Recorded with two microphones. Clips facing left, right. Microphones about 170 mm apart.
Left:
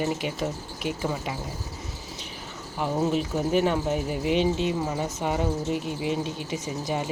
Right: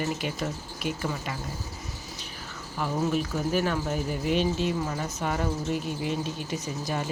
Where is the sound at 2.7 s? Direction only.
20° left (ahead or behind).